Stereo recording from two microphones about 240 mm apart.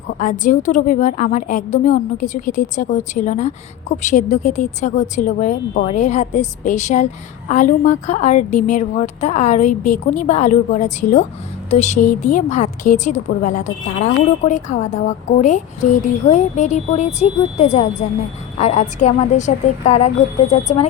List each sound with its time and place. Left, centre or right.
0.2 s a woman's voice: left